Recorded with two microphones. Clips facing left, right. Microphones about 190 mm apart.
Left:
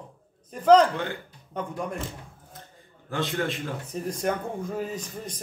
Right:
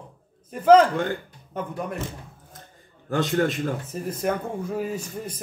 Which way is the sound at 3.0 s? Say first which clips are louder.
Right 6 dB; 45° right (ahead or behind).